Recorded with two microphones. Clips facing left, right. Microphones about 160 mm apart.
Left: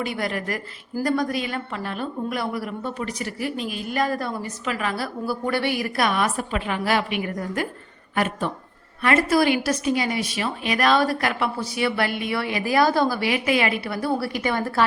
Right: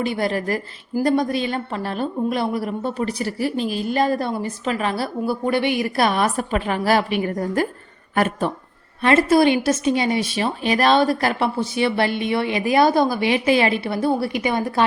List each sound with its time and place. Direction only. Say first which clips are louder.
0.0 s a woman's voice: right 5 dB; 30° right (ahead or behind)
9.0 s a woman's voice: right 4 dB; 25° right (ahead or behind)